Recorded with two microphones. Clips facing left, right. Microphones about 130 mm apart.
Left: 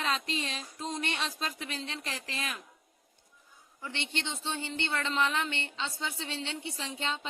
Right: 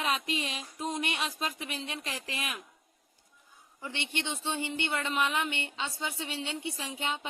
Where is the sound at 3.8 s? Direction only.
15° right (ahead or behind).